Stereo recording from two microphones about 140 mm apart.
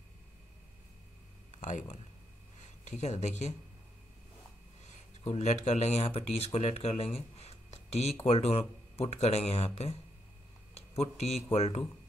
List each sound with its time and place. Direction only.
1.6 s speech: 65° left (ahead or behind)
4.8 s speech: 55° left (ahead or behind)
10.7 s a sound: 50° left (ahead or behind)
11.5 s speech: 45° left (ahead or behind)